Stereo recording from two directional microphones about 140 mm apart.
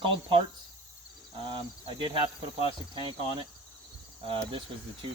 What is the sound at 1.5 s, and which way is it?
Speech, 35° right (ahead or behind).